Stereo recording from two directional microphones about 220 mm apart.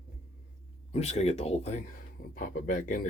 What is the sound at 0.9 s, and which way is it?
Speech, 30° left (ahead or behind).